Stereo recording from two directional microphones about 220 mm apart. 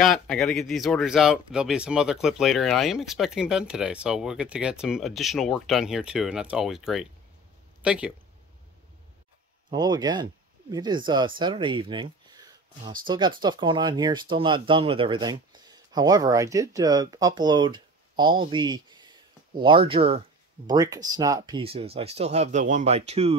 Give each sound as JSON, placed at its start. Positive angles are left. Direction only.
{"t": 0.0, "sound": "speech", "side_deg": 0}
{"t": 9.7, "sound": "speech", "side_deg": -20}